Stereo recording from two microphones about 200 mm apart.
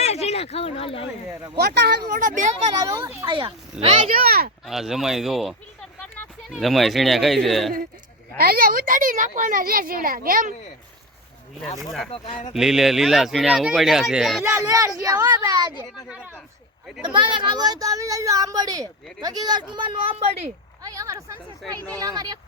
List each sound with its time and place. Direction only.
0.0 s speech: 30° left (ahead or behind)
1.5 s speech: 55° right (ahead or behind); by 2.7 s 40° right (ahead or behind)
2.8 s speech: 15° right (ahead or behind)
3.2 s speech: 25° right (ahead or behind)
4.1 s speech: 50° right (ahead or behind)
4.6 s speech: centre (ahead or behind)
8.4 s speech: 50° right (ahead or behind)
11.8 s speech: centre (ahead or behind)
12.1 s speech: 30° left (ahead or behind)
12.5 s speech: centre (ahead or behind)
14.4 s speech: 15° right (ahead or behind)
16.0 s speech: 5° right (ahead or behind)
17.1 s speech: 25° right (ahead or behind)
20.8 s speech: 15° right (ahead or behind)